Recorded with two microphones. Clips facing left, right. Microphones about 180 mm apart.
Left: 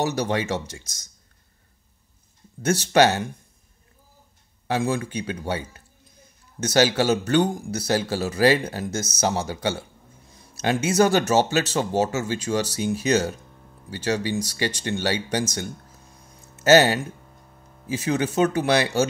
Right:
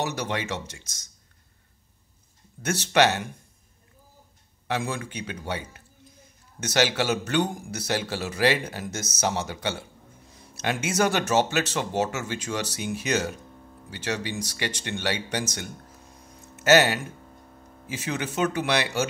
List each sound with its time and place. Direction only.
0.0 s a man's voice: 35° left (ahead or behind)
2.6 s a man's voice: 35° left (ahead or behind)
4.6 s a man's voice: 35° left (ahead or behind)
16.5 s a man's voice: 30° left (ahead or behind)